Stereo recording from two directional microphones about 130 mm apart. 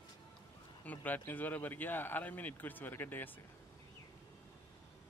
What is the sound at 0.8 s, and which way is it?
Speech, 15° left (ahead or behind).